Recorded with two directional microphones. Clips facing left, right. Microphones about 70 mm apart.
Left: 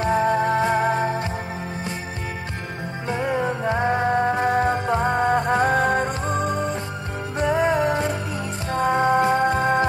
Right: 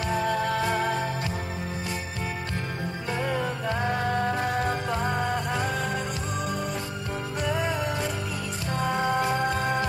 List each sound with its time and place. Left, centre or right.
0.0 s music: left
3.1 s music: left